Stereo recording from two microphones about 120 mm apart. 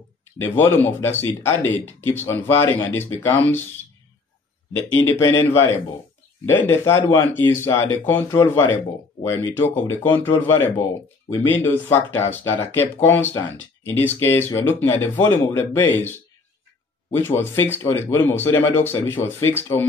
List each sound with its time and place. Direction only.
0.4 s speech: 20° left (ahead or behind)
5.0 s speech: 25° left (ahead or behind)